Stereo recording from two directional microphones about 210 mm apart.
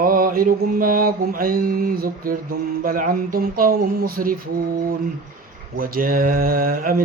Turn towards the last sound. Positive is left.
turn(degrees=-40)  # may be behind; listen again after turning